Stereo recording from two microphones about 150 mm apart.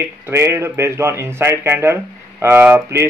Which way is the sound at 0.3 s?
20° right (ahead or behind).